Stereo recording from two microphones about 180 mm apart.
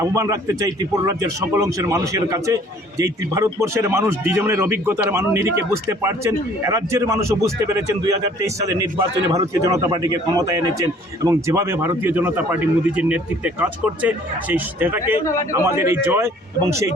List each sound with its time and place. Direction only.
0.0 s speech: 20° right (ahead or behind)